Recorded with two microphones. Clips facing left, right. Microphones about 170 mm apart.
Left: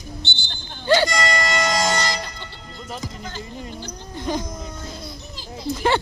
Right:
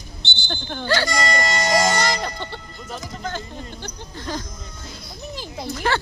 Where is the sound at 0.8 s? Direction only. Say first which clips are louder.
Left 5 dB; 20° left (ahead or behind).